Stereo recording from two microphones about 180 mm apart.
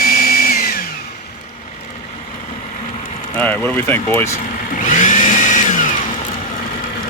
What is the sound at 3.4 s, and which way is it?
Speech, 10° left (ahead or behind).